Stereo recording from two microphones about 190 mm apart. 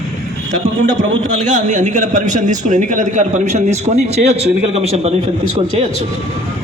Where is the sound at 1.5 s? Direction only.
40° right (ahead or behind).